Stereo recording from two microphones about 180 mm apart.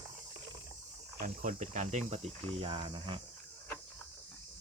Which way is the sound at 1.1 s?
45° right (ahead or behind).